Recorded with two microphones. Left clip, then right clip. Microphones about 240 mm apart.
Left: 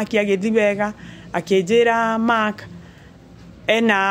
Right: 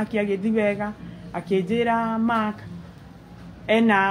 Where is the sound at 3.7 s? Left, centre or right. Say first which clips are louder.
Left 2 dB; left.